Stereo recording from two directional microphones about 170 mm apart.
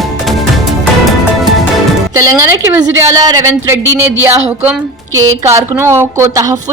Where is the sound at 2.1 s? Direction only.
20° right (ahead or behind).